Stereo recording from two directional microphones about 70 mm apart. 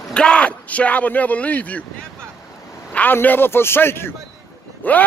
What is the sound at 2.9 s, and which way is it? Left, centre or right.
A man's voice, left.